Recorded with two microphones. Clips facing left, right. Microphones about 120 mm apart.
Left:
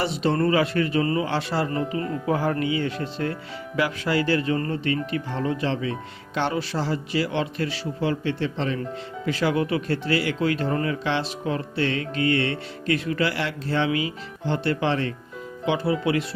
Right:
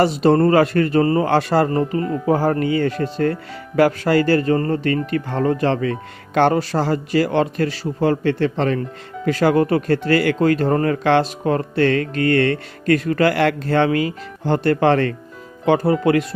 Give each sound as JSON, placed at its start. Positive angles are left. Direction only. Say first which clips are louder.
{"t": 0.0, "sound": "speech", "louder": "right 8 dB", "side_deg": -45}
{"t": 15.6, "sound": "speech", "louder": "right 7 dB", "side_deg": -45}